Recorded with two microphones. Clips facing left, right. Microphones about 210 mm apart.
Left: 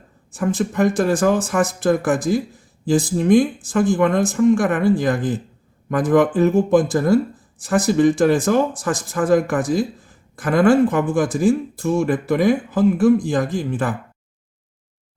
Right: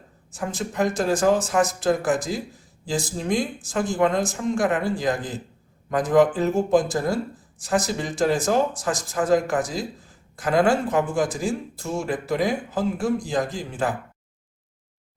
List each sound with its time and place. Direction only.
0.3 s speech: 55° left (ahead or behind)